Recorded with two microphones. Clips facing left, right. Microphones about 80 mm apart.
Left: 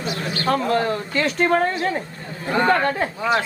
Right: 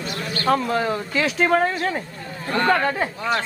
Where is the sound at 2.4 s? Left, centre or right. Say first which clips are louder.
Left 2 dB; centre.